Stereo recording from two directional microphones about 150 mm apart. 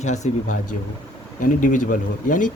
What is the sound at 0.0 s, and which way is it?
Speech, 50° left (ahead or behind).